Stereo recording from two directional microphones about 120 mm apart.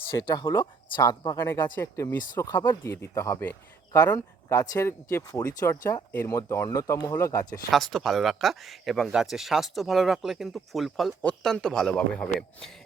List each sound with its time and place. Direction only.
0.4 s speech: 45° left (ahead or behind)
1.4 s speech: 20° left (ahead or behind)
2.3 s speech: 30° left (ahead or behind)
7.7 s speech: centre (ahead or behind)
11.2 s a man's voice: 10° left (ahead or behind)